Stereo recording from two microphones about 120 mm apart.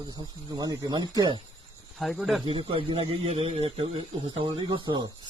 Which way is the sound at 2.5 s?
45° right (ahead or behind).